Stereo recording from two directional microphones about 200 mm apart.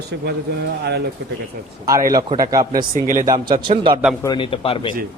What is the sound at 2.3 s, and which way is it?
Speech, 20° right (ahead or behind).